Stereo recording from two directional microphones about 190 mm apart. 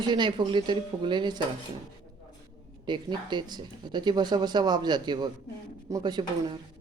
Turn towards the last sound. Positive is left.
turn(degrees=-20)  # may be behind; listen again after turning